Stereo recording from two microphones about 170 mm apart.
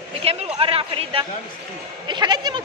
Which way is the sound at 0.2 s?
35° right (ahead or behind).